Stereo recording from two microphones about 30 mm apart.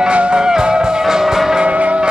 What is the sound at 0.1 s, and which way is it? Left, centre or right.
Music, right.